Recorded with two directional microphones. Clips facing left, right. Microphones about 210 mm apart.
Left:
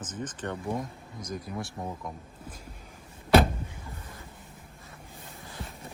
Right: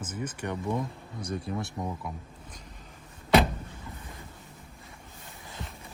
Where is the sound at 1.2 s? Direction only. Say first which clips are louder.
Right 3 dB; 20° right (ahead or behind).